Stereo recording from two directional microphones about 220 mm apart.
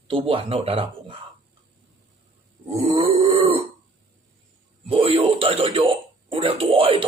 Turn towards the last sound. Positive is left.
turn(degrees=-25)  # may be behind; listen again after turning